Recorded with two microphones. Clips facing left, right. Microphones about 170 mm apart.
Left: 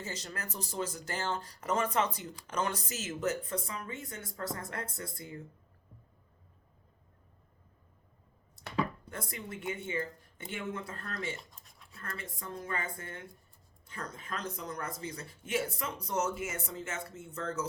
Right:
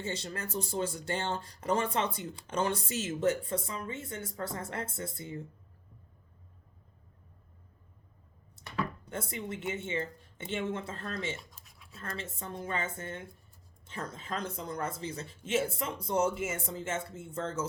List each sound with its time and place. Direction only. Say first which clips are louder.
0.0 s speech: right 4 dB; 30° right (ahead or behind)
9.0 s speech: right 4 dB; 25° right (ahead or behind)
11.3 s a sound: right 1 dB; centre (ahead or behind)
11.9 s speech: right 3 dB; 25° right (ahead or behind)